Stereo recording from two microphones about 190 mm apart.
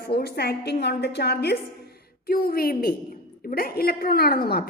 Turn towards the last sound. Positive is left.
turn(degrees=55)  # may be behind; listen again after turning